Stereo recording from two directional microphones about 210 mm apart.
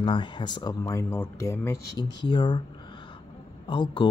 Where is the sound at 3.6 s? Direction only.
20° left (ahead or behind).